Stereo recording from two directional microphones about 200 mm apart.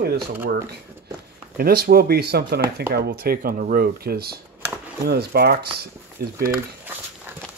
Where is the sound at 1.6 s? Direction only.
50° right (ahead or behind).